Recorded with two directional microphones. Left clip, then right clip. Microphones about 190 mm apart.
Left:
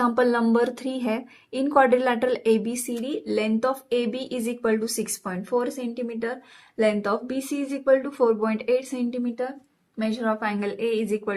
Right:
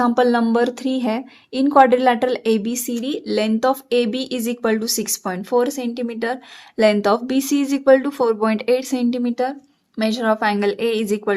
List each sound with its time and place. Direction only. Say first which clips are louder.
0.0 s a woman's voice: right 5 dB; 30° right (ahead or behind); by 11.3 s 50° right (ahead or behind)